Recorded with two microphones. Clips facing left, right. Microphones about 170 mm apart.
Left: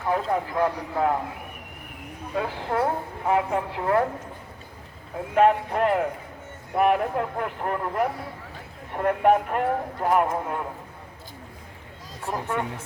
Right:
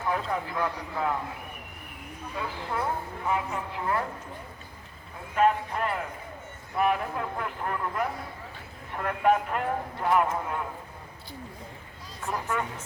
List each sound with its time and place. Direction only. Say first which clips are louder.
0.1 s speech: left 6 dB; 40° left (ahead or behind)
2.3 s a woman's voice: left 7 dB; 65° left (ahead or behind)
5.3 s a woman's voice: left 5 dB; 65° left (ahead or behind); by 8.0 s 50° left (ahead or behind)
9.0 s speech: left 4 dB; 40° left (ahead or behind)
12.2 s speech: left 2 dB; 30° left (ahead or behind)